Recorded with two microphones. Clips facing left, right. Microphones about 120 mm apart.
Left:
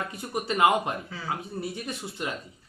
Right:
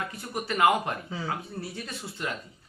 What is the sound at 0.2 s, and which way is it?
A man's voice, 20° left (ahead or behind).